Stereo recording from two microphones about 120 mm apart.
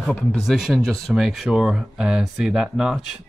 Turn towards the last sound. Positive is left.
turn(degrees=-5)  # may be behind; listen again after turning